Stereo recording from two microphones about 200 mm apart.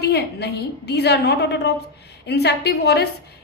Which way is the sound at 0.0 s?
55° left (ahead or behind).